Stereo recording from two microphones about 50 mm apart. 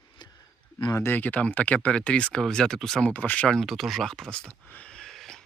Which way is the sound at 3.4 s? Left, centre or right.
Centre.